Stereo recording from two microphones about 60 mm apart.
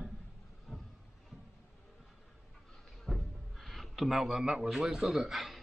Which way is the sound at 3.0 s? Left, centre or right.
Centre.